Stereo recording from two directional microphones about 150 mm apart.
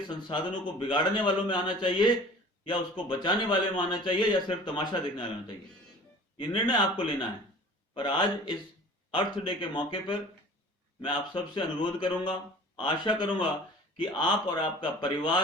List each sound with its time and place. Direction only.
0.1 s a man's voice: 30° left (ahead or behind)
7.9 s a man's voice: 30° left (ahead or behind)